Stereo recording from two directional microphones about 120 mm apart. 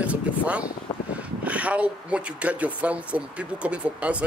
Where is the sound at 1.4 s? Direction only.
10° right (ahead or behind).